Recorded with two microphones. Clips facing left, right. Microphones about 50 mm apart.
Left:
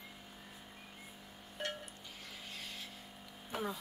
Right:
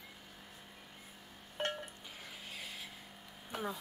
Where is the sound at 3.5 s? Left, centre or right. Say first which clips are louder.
Left 1 dB; centre.